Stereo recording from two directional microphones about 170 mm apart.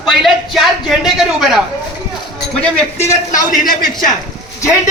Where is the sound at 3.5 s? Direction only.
50° left (ahead or behind).